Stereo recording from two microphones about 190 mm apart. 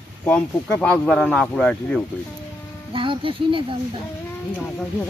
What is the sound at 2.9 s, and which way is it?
Speech, 25° right (ahead or behind).